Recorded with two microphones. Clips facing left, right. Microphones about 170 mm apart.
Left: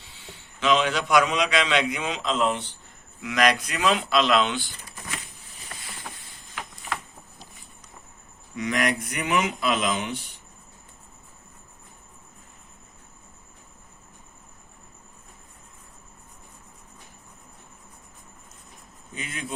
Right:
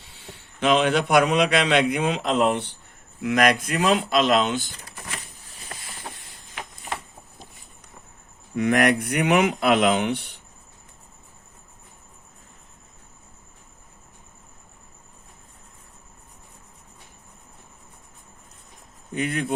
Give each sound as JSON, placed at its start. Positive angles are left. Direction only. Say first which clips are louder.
{"t": 0.0, "sound": "a man's voice", "louder": "right 2 dB", "side_deg": -55}
{"t": 3.2, "sound": "speech", "louder": "right 3 dB", "side_deg": -50}
{"t": 8.5, "sound": "speech", "louder": "right 6 dB", "side_deg": -55}
{"t": 19.1, "sound": "speech", "louder": "right 10 dB", "side_deg": -60}